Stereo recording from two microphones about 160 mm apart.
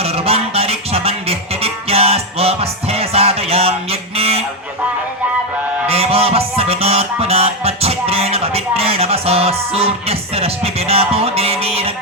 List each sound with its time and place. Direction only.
0.0 s music: 40° right (ahead or behind)
4.2 s goose: 40° right (ahead or behind)
5.9 s music: 40° right (ahead or behind)